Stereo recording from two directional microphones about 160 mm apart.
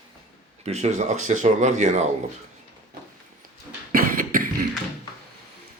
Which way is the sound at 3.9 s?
60° right (ahead or behind).